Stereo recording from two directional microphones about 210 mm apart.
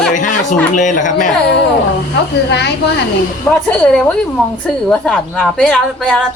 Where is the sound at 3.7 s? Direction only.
5° left (ahead or behind).